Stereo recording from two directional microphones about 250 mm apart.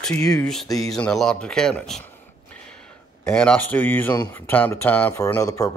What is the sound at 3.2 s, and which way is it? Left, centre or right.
Speech, centre.